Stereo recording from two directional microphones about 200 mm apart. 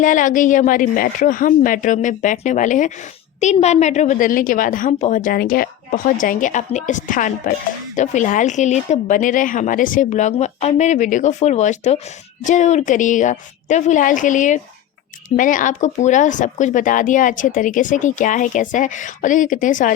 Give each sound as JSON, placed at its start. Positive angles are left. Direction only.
{"t": 0.0, "sound": "speech", "side_deg": 40}